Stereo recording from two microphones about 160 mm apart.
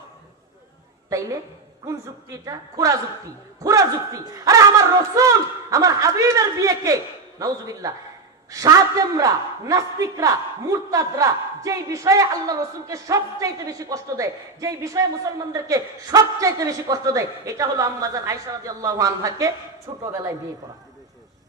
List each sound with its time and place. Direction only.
2.4 s a woman's voice: 20° right (ahead or behind)